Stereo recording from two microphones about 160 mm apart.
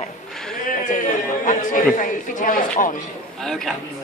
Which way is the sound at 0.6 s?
55° left (ahead or behind).